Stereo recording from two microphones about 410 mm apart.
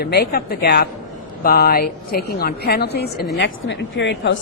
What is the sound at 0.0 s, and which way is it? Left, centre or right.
A woman's voice, left.